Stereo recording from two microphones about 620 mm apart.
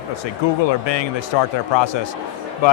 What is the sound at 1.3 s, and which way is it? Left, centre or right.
Speech, left.